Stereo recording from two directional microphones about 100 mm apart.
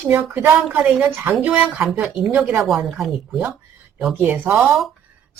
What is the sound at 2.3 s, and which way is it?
Speech, 15° right (ahead or behind).